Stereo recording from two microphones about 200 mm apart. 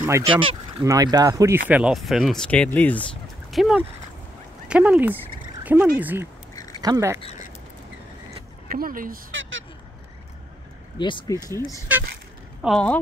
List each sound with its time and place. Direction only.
0.2 s speech: 25° right (ahead or behind)
1.7 s speech: 5° right (ahead or behind)
5.6 s frog: 10° right (ahead or behind)
5.9 s speech: 10° right (ahead or behind)
6.5 s a sound: 15° left (ahead or behind)
6.8 s speech: 15° right (ahead or behind)
7.2 s speech: 30° left (ahead or behind)
8.6 s speech: 45° right (ahead or behind)
9.3 s vehicle: 75° right (ahead or behind)
11.0 s speech: 25° left (ahead or behind)
12.6 s speech: 5° left (ahead or behind)